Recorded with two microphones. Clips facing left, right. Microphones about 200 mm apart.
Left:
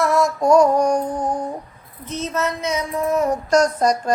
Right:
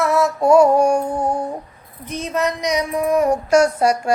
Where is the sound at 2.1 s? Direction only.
15° right (ahead or behind).